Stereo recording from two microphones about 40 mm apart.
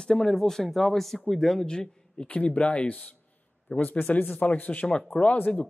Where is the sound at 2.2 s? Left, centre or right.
Left.